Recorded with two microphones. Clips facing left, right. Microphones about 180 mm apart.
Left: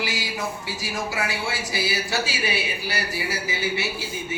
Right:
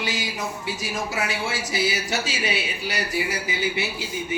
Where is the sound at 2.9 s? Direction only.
15° right (ahead or behind).